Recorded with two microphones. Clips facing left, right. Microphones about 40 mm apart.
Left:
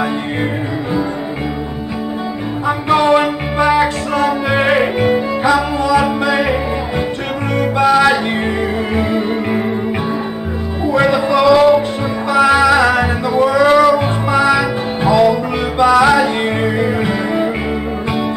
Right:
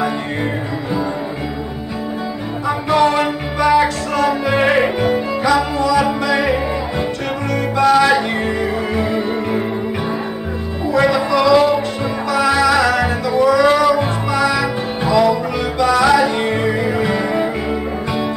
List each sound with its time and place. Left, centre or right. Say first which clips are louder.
2.6 s music: left 1 dB; centre
7.8 s music: left 1 dB; centre
11.0 s music: left 2 dB; centre